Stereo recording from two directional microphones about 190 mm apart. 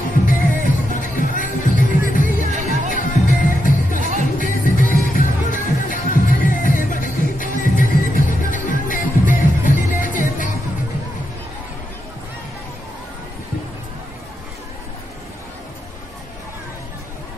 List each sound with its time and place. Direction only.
0.3 s music: 45° left (ahead or behind)
2.5 s music: 40° right (ahead or behind)
2.9 s music: 45° left (ahead or behind)